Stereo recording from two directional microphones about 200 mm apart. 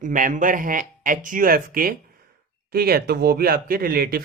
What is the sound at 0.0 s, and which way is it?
Speech, 40° right (ahead or behind).